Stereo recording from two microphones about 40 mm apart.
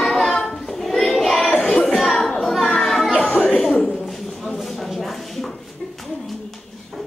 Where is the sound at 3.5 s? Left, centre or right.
Centre.